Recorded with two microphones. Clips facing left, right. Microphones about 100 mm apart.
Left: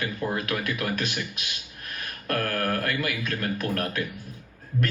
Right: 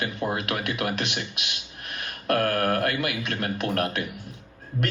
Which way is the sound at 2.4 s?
50° right (ahead or behind).